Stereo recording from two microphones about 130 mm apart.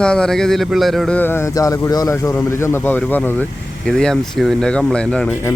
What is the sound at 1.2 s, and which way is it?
A man's voice, 15° left (ahead or behind).